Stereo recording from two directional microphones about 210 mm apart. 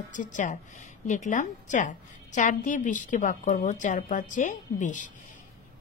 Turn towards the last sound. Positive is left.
turn(degrees=35)  # may be behind; listen again after turning